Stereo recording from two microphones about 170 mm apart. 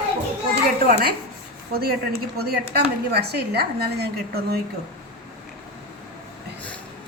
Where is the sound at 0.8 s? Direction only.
60° right (ahead or behind).